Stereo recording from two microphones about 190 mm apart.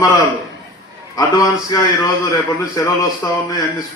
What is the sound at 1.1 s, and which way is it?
A man's voice, 20° left (ahead or behind).